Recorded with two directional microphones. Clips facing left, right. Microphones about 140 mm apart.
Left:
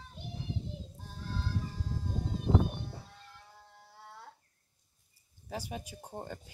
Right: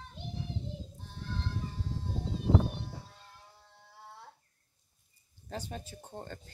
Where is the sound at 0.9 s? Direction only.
40° left (ahead or behind).